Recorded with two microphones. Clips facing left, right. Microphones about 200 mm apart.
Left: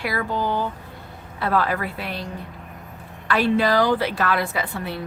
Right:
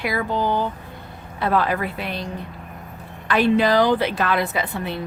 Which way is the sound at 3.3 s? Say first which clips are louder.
Right 2 dB; 20° right (ahead or behind).